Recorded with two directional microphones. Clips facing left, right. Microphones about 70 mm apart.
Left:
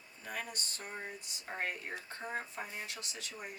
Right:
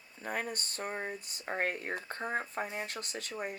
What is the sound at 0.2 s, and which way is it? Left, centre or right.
Speech, right.